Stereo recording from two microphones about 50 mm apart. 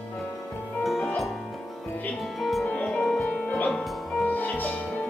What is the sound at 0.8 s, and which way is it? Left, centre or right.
Music, centre.